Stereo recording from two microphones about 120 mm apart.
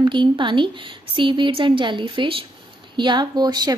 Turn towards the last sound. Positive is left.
turn(degrees=-35)  # may be behind; listen again after turning